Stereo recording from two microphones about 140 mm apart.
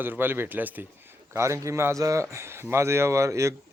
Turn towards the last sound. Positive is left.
turn(degrees=-20)  # may be behind; listen again after turning